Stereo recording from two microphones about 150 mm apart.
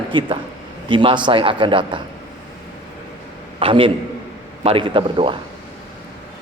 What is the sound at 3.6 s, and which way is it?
A man's voice, 35° right (ahead or behind).